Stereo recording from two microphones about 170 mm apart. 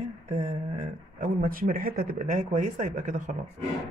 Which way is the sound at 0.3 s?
45° right (ahead or behind).